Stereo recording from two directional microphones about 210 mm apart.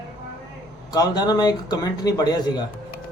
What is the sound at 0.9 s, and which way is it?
Speech, 20° left (ahead or behind).